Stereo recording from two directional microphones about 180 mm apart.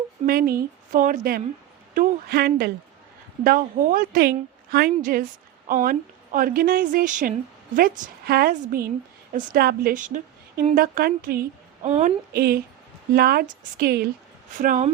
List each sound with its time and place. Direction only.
0.3 s a woman's voice: 55° right (ahead or behind)
3.4 s a woman's voice: 50° right (ahead or behind)
11.9 s a woman's voice: 40° right (ahead or behind)
12.3 s a woman's voice: 60° right (ahead or behind)
14.6 s a woman's voice: 50° right (ahead or behind)